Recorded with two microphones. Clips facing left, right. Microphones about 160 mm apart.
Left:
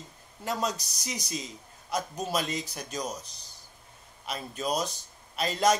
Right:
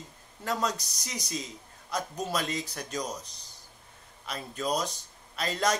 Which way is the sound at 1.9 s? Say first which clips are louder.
Left 1 dB; 20° left (ahead or behind).